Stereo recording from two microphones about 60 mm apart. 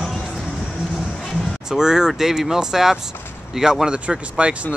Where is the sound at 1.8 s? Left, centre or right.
Centre.